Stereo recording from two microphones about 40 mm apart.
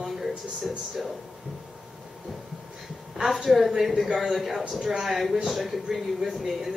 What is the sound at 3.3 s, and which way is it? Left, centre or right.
Speech, centre.